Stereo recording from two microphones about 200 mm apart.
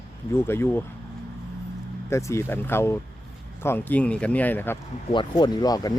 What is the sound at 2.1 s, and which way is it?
Speech, 15° left (ahead or behind).